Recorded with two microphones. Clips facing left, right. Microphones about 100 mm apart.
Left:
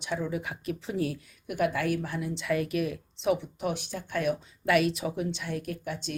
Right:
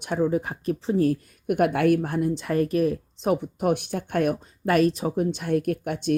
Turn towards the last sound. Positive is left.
turn(degrees=-55)  # may be behind; listen again after turning